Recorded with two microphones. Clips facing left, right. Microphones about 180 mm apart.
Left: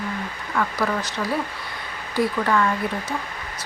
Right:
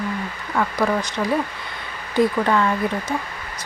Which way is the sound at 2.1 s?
20° right (ahead or behind).